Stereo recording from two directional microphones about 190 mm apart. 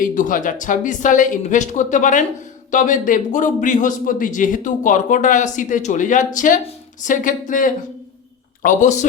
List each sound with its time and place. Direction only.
0.0 s a man's voice: 45° left (ahead or behind)